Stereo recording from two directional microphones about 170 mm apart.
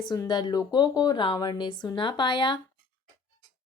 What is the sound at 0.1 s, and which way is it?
A woman's voice, 25° left (ahead or behind).